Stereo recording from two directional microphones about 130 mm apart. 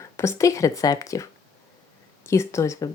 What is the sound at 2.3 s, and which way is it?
Speech, 20° left (ahead or behind).